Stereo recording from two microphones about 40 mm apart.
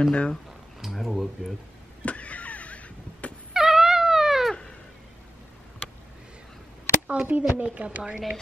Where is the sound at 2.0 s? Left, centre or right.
Left.